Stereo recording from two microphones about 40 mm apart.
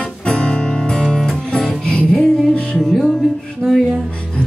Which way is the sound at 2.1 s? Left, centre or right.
Centre.